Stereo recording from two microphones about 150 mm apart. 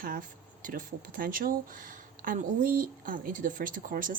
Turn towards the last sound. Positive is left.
turn(degrees=-65)  # may be behind; listen again after turning